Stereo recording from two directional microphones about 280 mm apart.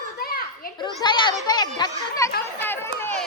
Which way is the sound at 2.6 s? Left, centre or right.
Centre.